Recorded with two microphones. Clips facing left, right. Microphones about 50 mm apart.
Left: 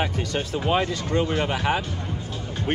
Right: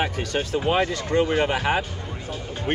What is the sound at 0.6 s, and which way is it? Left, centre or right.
Speech, centre.